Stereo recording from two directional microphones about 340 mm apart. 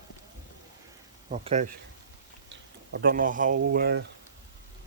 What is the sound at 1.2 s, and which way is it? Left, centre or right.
Speech, right.